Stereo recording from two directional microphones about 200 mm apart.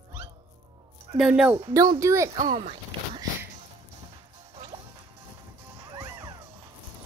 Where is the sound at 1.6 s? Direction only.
20° right (ahead or behind).